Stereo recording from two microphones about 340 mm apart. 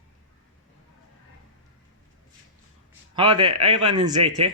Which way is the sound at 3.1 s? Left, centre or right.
Centre.